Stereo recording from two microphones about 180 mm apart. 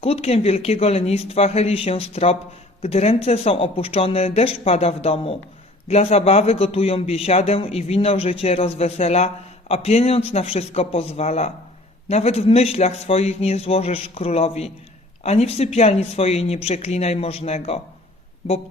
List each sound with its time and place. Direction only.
0.0 s a man's voice: 35° left (ahead or behind)